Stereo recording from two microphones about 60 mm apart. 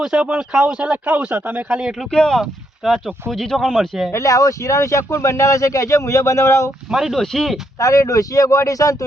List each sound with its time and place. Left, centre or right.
0.0 s speech: centre
1.7 s speech: centre
2.0 s speech: centre
2.4 s speech: centre
3.2 s speech: centre
4.1 s speech: left
6.9 s speech: centre
7.8 s speech: left